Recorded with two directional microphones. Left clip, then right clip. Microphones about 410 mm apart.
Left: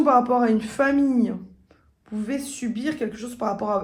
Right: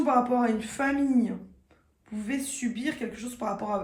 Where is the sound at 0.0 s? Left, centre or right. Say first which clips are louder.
Left 6 dB; centre.